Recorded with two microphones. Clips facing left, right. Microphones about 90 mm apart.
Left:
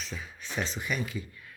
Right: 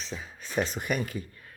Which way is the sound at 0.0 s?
35° right (ahead or behind).